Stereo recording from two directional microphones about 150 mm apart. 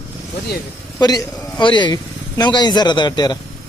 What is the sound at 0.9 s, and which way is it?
Speech, 25° left (ahead or behind).